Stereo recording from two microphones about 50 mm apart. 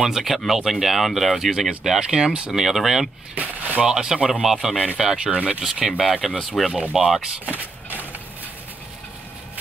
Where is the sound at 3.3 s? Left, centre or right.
Right.